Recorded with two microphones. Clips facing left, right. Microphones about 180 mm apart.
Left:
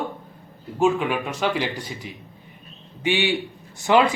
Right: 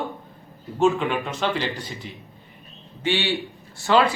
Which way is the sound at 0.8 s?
5° left (ahead or behind).